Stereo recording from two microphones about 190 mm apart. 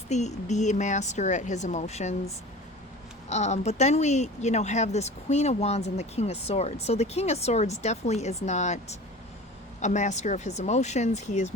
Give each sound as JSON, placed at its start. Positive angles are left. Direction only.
{"t": 0.1, "sound": "speech", "side_deg": 35}